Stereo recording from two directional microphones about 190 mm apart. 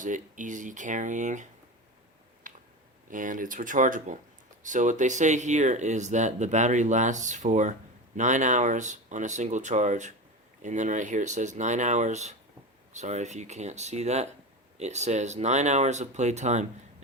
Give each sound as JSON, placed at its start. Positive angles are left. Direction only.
{"t": 0.0, "sound": "speech", "side_deg": -40}
{"t": 3.1, "sound": "speech", "side_deg": -45}